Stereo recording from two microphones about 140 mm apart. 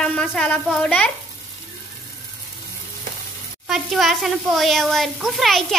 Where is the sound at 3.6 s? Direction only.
Centre (ahead or behind).